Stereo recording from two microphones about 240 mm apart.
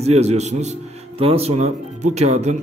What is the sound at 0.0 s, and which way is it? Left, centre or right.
A man's voice, right.